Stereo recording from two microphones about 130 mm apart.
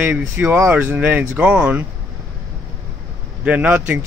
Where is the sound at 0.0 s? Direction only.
10° right (ahead or behind).